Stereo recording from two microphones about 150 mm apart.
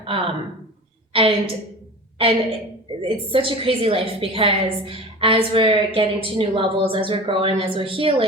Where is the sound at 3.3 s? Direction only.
35° right (ahead or behind).